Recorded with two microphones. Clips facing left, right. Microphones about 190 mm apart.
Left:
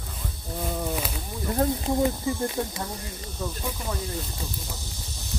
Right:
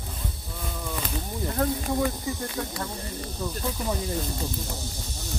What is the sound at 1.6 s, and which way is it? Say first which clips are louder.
Snake: left 2 dB; 25° left (ahead or behind).